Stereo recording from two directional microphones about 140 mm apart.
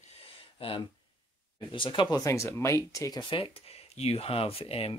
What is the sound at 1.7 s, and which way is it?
Speech, 35° left (ahead or behind).